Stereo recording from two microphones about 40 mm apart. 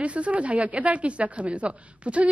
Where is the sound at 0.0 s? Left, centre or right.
Right.